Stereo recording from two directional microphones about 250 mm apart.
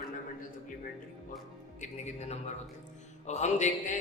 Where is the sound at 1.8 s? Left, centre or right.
Left.